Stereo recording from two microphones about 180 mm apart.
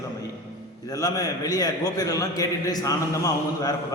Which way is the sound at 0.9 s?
20° left (ahead or behind).